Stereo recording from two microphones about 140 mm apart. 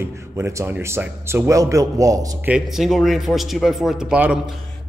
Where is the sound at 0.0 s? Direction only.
20° right (ahead or behind).